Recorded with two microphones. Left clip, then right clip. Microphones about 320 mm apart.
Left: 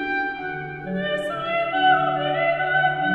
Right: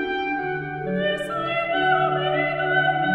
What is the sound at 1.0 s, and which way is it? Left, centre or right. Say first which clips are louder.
Music: even; centre.